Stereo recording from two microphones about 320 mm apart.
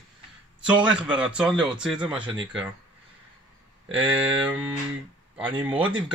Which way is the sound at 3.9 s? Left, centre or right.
Centre.